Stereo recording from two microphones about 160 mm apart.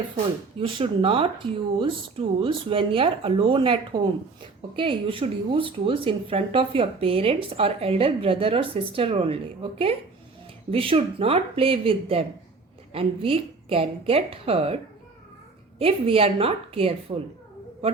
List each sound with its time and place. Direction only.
0.6 s speech: 35° right (ahead or behind)
15.8 s speech: 35° right (ahead or behind)